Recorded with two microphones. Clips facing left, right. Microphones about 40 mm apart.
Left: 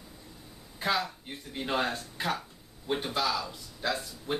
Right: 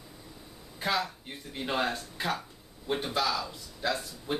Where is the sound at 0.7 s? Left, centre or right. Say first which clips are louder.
Left 1 dB; centre.